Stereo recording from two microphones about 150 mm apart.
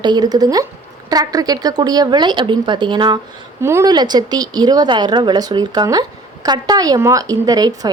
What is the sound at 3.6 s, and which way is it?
A woman's voice, 20° right (ahead or behind).